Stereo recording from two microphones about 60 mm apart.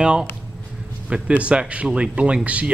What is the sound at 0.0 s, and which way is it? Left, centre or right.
Speech, centre.